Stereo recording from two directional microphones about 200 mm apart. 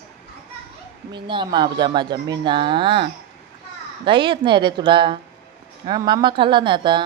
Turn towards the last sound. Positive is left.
turn(degrees=-25)  # may be behind; listen again after turning